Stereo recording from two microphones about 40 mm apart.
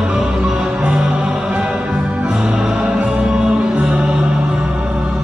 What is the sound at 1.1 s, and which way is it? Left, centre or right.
Music, right.